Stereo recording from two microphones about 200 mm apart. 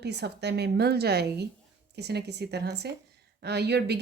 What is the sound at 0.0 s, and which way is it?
Speech, 55° right (ahead or behind).